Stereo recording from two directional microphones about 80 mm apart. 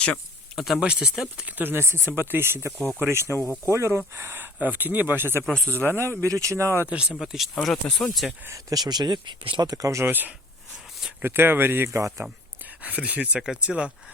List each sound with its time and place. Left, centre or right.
0.5 s speech: centre
0.8 s speech: centre
1.5 s speech: right
5.4 s speech: centre
5.8 s speech: right
6.2 s speech: right
6.9 s speech: centre
8.7 s speech: right
9.6 s speech: right
10.1 s speech: right
12.8 s speech: centre